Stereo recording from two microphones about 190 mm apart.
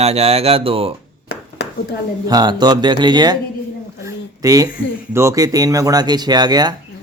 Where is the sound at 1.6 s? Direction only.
65° left (ahead or behind).